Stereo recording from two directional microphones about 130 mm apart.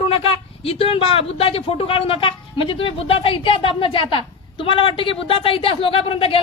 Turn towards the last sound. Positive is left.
turn(degrees=45)  # may be behind; listen again after turning